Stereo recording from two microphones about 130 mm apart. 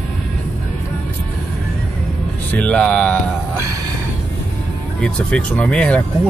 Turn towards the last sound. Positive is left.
turn(degrees=10)  # may be behind; listen again after turning